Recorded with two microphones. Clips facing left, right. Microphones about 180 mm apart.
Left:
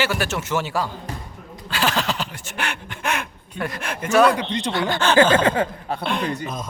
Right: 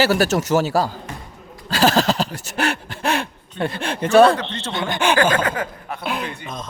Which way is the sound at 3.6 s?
30° right (ahead or behind).